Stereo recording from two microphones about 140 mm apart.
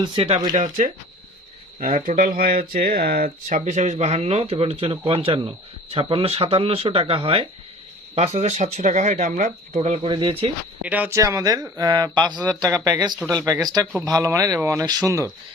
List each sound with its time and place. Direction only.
0.0 s speech: 35° right (ahead or behind)
0.5 s speech: 60° right (ahead or behind); by 10.5 s 35° right (ahead or behind)
10.8 s speech: 10° right (ahead or behind)